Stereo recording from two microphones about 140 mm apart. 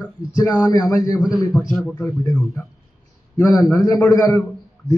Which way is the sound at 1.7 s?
5° left (ahead or behind).